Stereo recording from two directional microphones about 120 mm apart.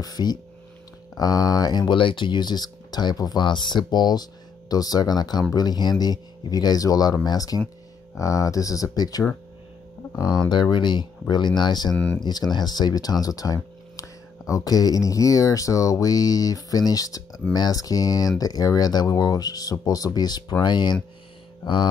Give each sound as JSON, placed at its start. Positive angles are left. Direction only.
{"t": 0.0, "sound": "speech", "side_deg": 35}
{"t": 10.5, "sound": "speech", "side_deg": 40}
{"t": 11.9, "sound": "speech", "side_deg": 10}
{"t": 12.2, "sound": "speech", "side_deg": 35}